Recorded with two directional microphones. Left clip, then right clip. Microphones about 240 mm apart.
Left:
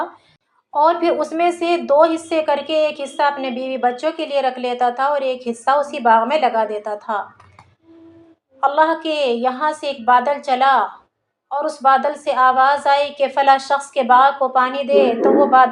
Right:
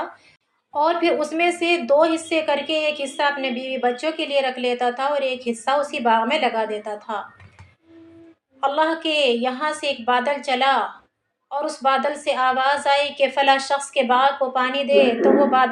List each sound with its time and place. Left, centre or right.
0.7 s speech: centre
8.6 s speech: centre